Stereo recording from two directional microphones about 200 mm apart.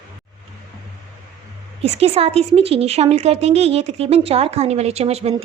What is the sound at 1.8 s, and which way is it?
Speech, 30° right (ahead or behind).